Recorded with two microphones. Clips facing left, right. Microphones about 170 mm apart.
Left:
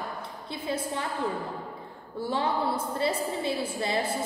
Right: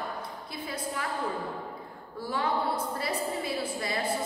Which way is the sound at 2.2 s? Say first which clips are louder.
Left 2 dB; 25° left (ahead or behind).